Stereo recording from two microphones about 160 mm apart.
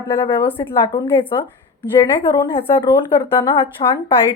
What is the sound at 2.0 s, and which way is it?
A woman's voice, 30° left (ahead or behind).